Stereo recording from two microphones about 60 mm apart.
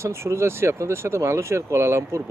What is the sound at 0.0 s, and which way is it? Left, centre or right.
Speech, right.